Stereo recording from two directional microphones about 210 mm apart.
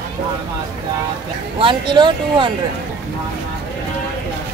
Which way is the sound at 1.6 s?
20° right (ahead or behind).